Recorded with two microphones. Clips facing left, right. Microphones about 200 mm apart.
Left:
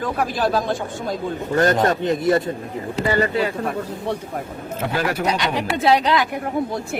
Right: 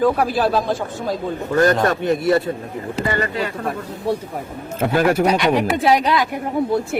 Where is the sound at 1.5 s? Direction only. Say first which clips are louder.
Right 1 dB; 20° left (ahead or behind).